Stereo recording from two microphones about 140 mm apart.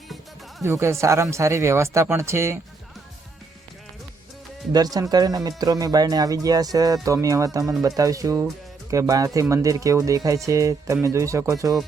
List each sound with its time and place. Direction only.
0.6 s speech: 20° right (ahead or behind)
4.9 s speech: 25° right (ahead or behind)